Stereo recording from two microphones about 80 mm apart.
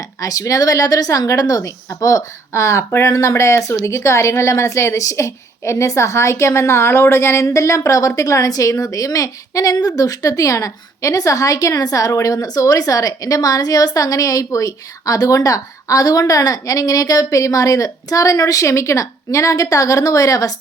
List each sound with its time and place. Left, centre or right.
0.2 s a woman's voice: left